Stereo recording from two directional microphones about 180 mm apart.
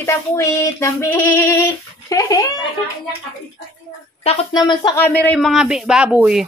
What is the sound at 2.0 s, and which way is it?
Speech, 20° left (ahead or behind).